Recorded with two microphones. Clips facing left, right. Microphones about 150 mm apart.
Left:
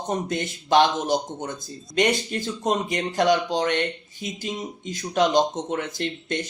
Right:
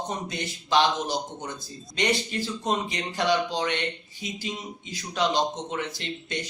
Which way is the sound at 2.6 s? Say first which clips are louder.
Left 6 dB; 50° left (ahead or behind).